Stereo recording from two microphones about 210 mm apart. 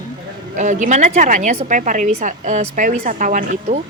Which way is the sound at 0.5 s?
35° right (ahead or behind).